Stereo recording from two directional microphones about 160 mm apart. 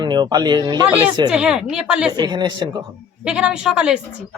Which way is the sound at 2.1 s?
25° right (ahead or behind).